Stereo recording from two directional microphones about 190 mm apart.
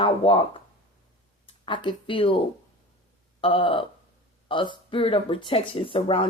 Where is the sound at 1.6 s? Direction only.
25° left (ahead or behind).